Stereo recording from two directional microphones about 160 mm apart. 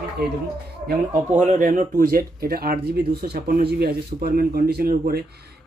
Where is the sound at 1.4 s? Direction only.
55° right (ahead or behind).